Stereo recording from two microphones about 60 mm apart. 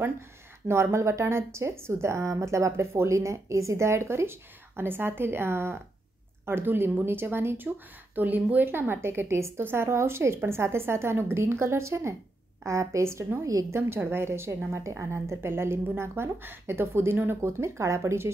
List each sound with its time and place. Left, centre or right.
0.9 s a woman's voice: right
14.7 s speech: right